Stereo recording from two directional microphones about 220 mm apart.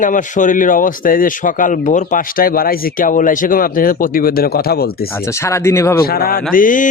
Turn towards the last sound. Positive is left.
turn(degrees=40)  # may be behind; listen again after turning